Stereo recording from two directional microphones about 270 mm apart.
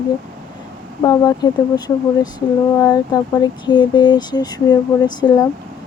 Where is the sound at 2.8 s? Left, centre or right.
Centre.